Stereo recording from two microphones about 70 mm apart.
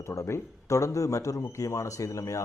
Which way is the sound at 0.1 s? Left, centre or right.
Left.